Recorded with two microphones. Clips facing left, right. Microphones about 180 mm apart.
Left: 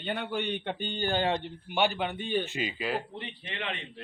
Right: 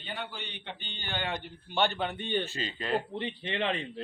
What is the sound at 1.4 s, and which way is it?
Speech, 15° left (ahead or behind).